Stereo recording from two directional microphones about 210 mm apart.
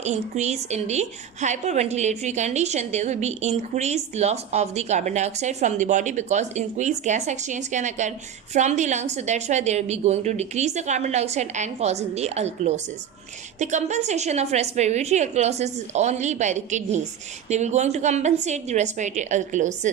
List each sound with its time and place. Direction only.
0.0 s a woman's voice: 35° right (ahead or behind)